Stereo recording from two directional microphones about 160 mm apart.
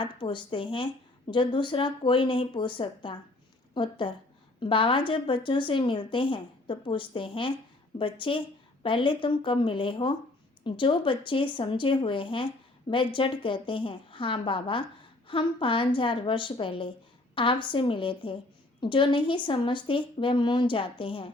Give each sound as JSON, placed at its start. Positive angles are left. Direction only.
{"t": 0.0, "sound": "a woman's voice", "side_deg": 30}